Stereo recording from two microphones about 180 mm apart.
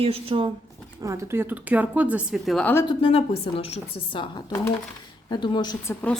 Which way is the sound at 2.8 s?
30° left (ahead or behind).